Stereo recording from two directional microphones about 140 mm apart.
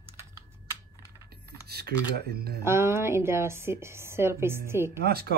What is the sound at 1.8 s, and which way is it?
Speech, 90° right.